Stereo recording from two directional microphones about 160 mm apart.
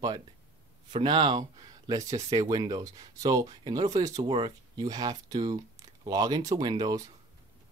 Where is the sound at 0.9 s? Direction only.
30° right (ahead or behind).